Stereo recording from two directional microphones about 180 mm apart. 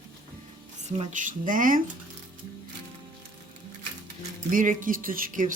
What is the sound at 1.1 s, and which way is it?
Speech, 45° right (ahead or behind).